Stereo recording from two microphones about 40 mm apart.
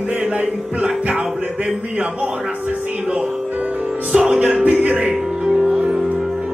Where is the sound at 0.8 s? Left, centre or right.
Right.